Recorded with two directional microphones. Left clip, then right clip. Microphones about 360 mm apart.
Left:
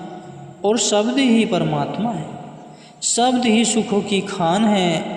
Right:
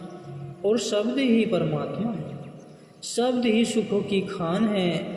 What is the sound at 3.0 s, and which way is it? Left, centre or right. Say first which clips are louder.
A man's voice: left 7 dB; left.